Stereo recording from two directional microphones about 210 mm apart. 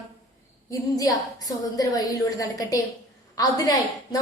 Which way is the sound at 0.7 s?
15° left (ahead or behind).